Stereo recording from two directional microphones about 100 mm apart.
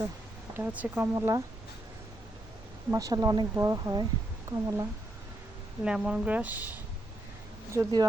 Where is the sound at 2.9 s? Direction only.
35° right (ahead or behind).